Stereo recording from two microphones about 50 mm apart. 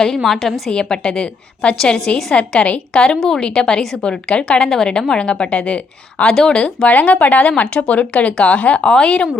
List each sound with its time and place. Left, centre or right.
0.3 s a woman's voice: centre
0.7 s a woman's voice: centre
6.8 s speech: left